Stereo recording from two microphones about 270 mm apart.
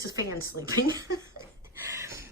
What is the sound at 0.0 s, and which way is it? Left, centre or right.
A woman's voice, centre.